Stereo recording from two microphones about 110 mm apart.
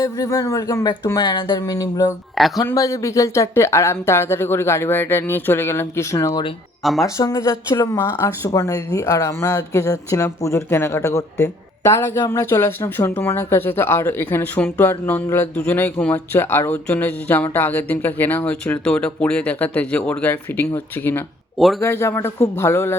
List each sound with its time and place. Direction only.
0.0 s speech: 30° left (ahead or behind)
2.4 s speech: centre (ahead or behind)
2.7 s speech: 30° left (ahead or behind)